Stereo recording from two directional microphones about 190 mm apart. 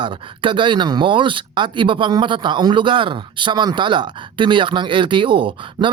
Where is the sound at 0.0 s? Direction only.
25° right (ahead or behind).